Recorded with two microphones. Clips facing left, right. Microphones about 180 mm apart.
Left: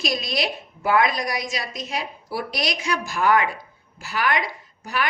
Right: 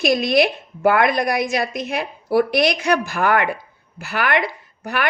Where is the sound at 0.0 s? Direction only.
55° right (ahead or behind).